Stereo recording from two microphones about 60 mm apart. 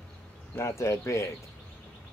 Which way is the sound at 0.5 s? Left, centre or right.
Left.